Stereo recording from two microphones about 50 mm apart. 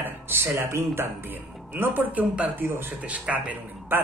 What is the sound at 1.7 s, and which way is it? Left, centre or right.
Speech, right.